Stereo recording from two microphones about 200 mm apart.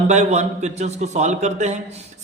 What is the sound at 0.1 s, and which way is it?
Speech, 35° right (ahead or behind).